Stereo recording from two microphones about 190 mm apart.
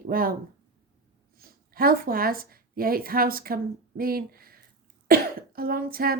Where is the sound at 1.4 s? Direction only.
50° right (ahead or behind).